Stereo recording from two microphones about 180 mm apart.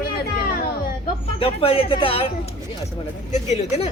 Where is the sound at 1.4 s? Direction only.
30° left (ahead or behind).